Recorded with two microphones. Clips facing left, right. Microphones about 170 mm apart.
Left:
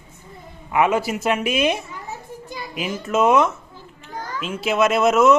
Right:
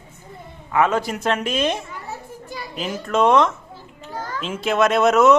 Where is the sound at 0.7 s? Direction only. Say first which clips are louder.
Left 1 dB; 10° left (ahead or behind).